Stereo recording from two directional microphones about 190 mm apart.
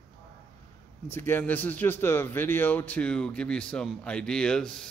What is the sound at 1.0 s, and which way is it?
A man's voice, 10° left (ahead or behind).